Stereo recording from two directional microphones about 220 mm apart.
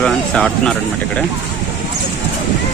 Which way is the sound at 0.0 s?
5° left (ahead or behind).